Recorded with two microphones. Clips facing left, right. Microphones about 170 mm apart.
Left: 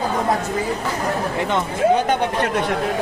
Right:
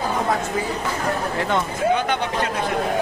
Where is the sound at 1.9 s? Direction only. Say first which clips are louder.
Left 3 dB; 40° left (ahead or behind).